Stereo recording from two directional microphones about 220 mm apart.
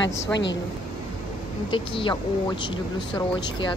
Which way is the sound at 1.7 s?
20° left (ahead or behind).